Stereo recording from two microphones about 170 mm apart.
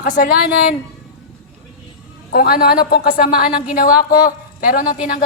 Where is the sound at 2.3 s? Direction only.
60° left (ahead or behind).